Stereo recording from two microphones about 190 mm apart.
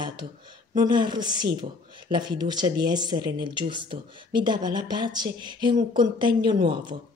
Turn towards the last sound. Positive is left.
turn(degrees=-25)  # may be behind; listen again after turning